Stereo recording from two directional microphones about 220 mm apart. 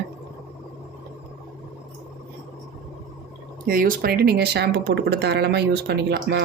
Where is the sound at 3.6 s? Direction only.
40° right (ahead or behind).